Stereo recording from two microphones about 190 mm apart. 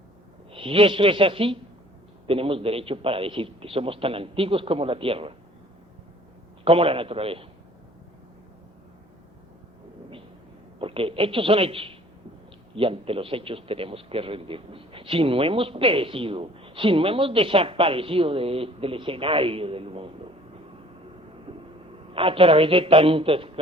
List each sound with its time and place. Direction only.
0.5 s a man's voice: 30° right (ahead or behind)
6.7 s a man's voice: 30° right (ahead or behind)
10.8 s a man's voice: 30° right (ahead or behind)
22.1 s a man's voice: 30° right (ahead or behind)